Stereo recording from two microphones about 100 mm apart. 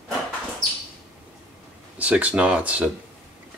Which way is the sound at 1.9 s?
15° right (ahead or behind).